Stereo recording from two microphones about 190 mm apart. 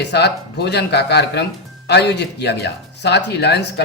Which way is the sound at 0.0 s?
60° left (ahead or behind).